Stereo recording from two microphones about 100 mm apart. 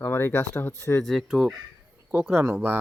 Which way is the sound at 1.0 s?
Centre (ahead or behind).